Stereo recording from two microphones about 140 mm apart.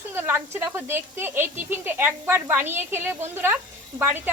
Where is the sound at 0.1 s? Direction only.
15° right (ahead or behind).